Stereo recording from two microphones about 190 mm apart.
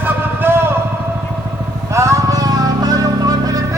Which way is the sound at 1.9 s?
15° right (ahead or behind).